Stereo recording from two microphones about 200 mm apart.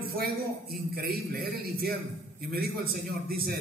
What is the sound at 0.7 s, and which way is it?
A man's voice, 50° right (ahead or behind).